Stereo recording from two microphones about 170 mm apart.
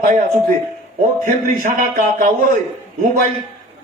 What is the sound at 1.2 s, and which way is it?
Speech, 55° right (ahead or behind).